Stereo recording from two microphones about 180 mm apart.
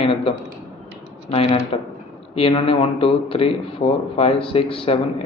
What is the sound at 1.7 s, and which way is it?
A man's voice, 35° left (ahead or behind).